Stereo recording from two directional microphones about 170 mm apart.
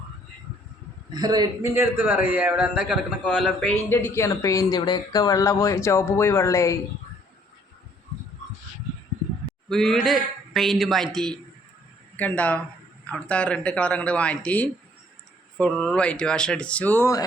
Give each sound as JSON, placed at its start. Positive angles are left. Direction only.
{"t": 1.1, "sound": "a man's voice", "side_deg": -25}
{"t": 1.7, "sound": "a man's voice", "side_deg": -10}
{"t": 9.6, "sound": "a man's voice", "side_deg": 5}